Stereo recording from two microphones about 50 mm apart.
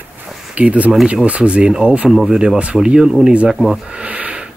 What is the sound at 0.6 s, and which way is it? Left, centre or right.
Speech, right.